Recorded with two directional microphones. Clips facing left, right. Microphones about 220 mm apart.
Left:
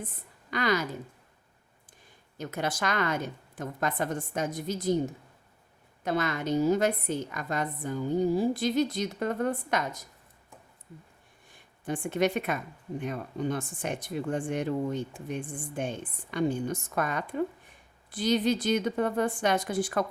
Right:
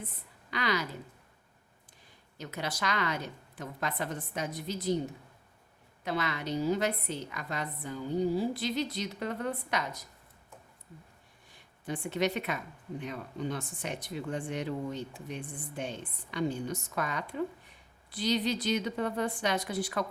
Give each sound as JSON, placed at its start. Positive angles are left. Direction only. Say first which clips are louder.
{"t": 0.0, "sound": "a woman's voice", "louder": "left 4 dB", "side_deg": 50}
{"t": 2.4, "sound": "speech", "louder": "left 5 dB", "side_deg": 50}
{"t": 6.1, "sound": "speech", "louder": "left 5 dB", "side_deg": 45}
{"t": 11.5, "sound": "speech", "louder": "left 4 dB", "side_deg": 50}